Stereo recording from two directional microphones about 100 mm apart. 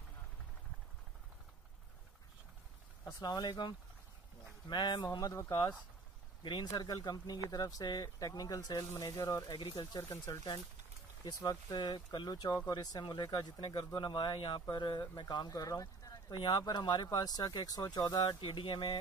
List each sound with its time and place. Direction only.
3.2 s speech: 45° left (ahead or behind)
9.5 s speech: 50° left (ahead or behind)
11.2 s speech: 35° left (ahead or behind)
11.7 s speech: 50° left (ahead or behind)